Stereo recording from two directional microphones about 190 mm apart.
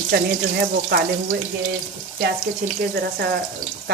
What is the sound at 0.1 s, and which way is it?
Speech, 60° right (ahead or behind).